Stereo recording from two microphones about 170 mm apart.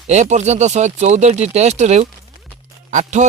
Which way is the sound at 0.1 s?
40° right (ahead or behind).